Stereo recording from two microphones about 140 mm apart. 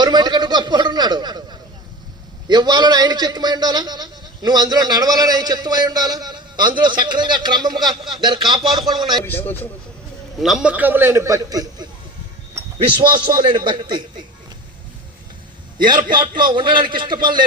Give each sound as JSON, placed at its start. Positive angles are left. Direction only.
{"t": 0.0, "sound": "a sound", "side_deg": -30}
{"t": 2.5, "sound": "a man's voice", "side_deg": -30}
{"t": 9.2, "sound": "a man's voice", "side_deg": 15}
{"t": 10.4, "sound": "a man's voice", "side_deg": -5}
{"t": 16.1, "sound": "a man's voice", "side_deg": -35}